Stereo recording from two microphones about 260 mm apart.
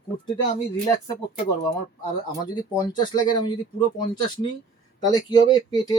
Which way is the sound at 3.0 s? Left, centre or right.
Centre.